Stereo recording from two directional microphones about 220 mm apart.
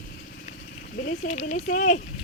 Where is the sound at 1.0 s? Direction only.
35° left (ahead or behind).